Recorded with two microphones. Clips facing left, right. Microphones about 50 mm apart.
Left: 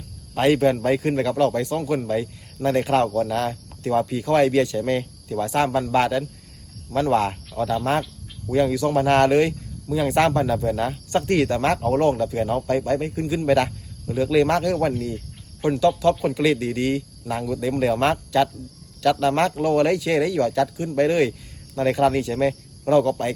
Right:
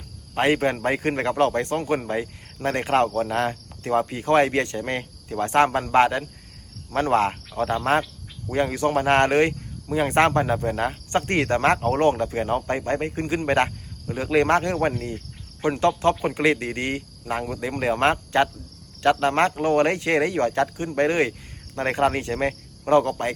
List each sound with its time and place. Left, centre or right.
0.3 s speech: right